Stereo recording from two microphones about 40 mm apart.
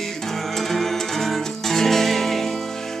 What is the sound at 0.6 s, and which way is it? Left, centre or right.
Music, centre.